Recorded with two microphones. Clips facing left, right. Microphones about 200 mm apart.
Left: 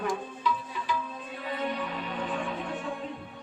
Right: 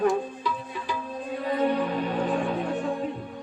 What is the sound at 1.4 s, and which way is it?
Music, 40° right (ahead or behind).